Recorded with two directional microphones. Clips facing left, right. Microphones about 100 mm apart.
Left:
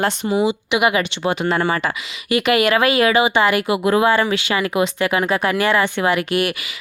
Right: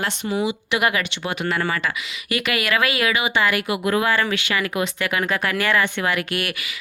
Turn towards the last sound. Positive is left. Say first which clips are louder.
# left 5 dB
turn(degrees=25)  # may be behind; listen again after turning